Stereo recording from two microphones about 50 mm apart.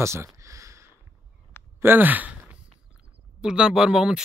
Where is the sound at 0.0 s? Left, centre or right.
Right.